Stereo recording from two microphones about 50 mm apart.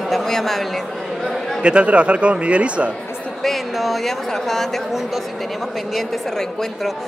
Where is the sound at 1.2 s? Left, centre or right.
Centre.